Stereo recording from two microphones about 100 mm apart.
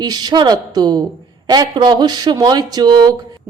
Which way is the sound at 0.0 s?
40° right (ahead or behind).